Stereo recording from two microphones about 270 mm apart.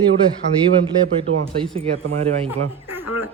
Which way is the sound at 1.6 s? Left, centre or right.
Right.